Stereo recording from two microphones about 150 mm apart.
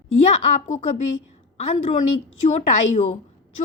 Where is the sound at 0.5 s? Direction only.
50° left (ahead or behind).